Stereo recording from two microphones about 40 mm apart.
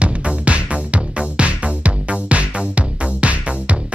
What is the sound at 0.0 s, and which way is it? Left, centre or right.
Music, right.